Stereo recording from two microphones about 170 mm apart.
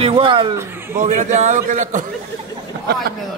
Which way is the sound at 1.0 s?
45° right (ahead or behind).